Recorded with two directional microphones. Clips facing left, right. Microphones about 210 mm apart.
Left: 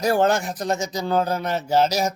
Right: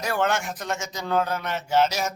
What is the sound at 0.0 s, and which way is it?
A man's voice, 35° left (ahead or behind).